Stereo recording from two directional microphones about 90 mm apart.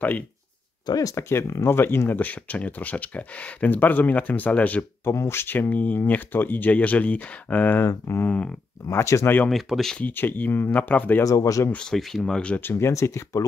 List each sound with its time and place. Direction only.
0.8 s speech: 40° left (ahead or behind)
1.3 s speech: 30° left (ahead or behind)
5.0 s speech: 30° left (ahead or behind)
9.5 s speech: centre (ahead or behind)
9.9 s speech: 20° left (ahead or behind)
11.2 s speech: 40° left (ahead or behind)
11.7 s speech: 5° left (ahead or behind)
12.6 s speech: 30° left (ahead or behind)